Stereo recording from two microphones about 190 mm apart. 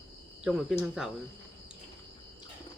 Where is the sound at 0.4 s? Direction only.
5° right (ahead or behind).